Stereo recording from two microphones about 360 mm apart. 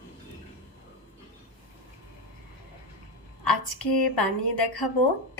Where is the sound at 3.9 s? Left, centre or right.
Left.